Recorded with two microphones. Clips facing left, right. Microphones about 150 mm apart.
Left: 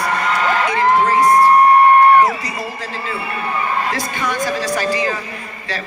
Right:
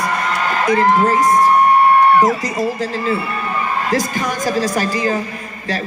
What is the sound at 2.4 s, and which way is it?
A woman's voice, 40° right (ahead or behind).